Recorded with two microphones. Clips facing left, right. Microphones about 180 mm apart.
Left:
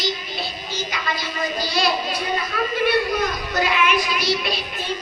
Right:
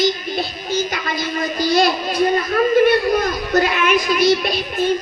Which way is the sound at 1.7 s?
50° right (ahead or behind).